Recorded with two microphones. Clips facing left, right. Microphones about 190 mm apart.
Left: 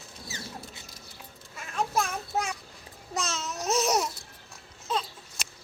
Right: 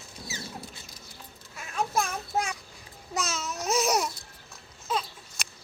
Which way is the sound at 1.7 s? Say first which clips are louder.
Even; centre (ahead or behind).